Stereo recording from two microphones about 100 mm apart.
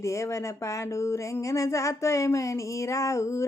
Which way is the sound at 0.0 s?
30° left (ahead or behind).